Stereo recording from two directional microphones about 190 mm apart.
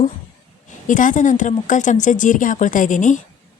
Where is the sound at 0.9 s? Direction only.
45° left (ahead or behind).